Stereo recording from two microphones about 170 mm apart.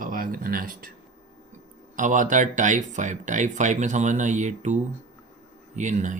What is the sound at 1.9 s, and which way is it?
Speech, 50° right (ahead or behind).